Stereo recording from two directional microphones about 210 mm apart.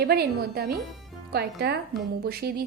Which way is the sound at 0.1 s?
45° right (ahead or behind).